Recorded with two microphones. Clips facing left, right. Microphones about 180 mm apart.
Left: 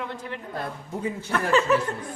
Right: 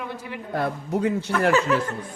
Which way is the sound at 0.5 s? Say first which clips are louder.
Right 10 dB; 70° right (ahead or behind).